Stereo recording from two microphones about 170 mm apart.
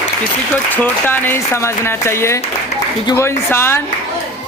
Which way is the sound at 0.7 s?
10° left (ahead or behind).